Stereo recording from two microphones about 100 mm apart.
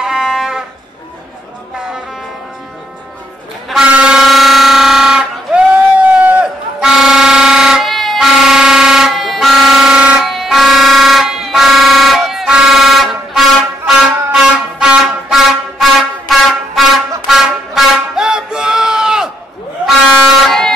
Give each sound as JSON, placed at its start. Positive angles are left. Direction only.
{"t": 0.0, "sound": "music", "side_deg": -5}
{"t": 3.6, "sound": "air horn", "side_deg": -5}
{"t": 17.3, "sound": "music", "side_deg": -5}